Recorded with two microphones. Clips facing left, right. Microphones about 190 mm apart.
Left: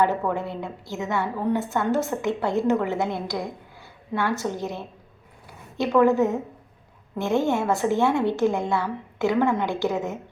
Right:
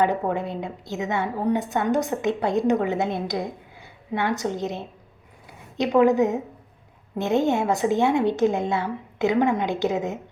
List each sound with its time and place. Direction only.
0.3 s a woman's voice: 20° right (ahead or behind)